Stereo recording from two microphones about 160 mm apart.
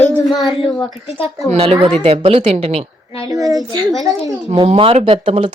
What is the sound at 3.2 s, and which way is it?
A woman's voice, 20° right (ahead or behind).